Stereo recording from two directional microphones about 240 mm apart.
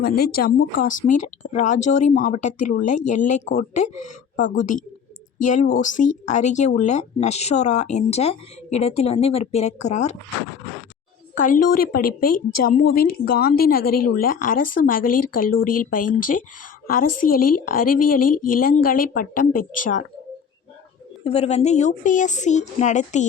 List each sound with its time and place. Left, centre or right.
0.0 s a woman's voice: left
11.5 s a woman's voice: left
21.2 s speech: left